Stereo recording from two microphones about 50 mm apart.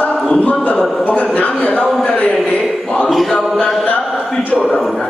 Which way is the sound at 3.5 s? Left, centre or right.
Centre.